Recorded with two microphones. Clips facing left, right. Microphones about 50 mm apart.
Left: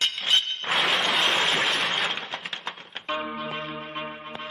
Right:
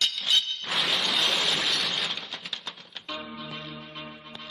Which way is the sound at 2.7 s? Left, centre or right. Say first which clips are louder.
Left 7 dB; left.